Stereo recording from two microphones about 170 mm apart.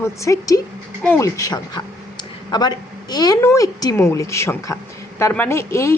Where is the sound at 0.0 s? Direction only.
20° left (ahead or behind).